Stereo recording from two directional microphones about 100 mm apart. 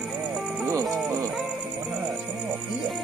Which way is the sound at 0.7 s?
30° right (ahead or behind).